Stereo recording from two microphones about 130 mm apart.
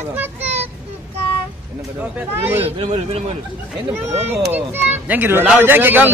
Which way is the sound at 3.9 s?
15° right (ahead or behind).